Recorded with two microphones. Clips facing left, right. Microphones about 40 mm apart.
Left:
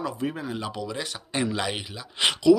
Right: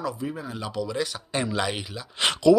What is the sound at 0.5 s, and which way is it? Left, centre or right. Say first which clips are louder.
Speech: right 1 dB; left.